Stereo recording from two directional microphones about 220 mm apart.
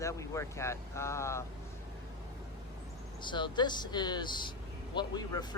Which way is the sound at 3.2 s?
20° left (ahead or behind).